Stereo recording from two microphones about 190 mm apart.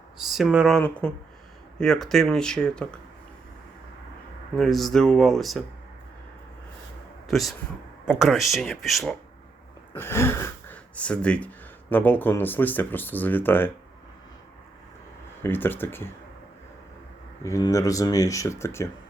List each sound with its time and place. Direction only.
0.2 s speech: centre (ahead or behind)
4.5 s speech: centre (ahead or behind)
7.3 s speech: centre (ahead or behind)
9.9 s speech: 10° left (ahead or behind)
15.4 s speech: 10° left (ahead or behind)
17.4 s speech: 15° left (ahead or behind)